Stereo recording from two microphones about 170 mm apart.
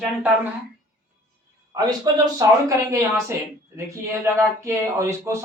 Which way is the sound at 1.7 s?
20° right (ahead or behind).